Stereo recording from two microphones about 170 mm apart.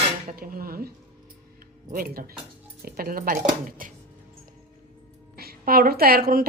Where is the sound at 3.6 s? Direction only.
50° right (ahead or behind).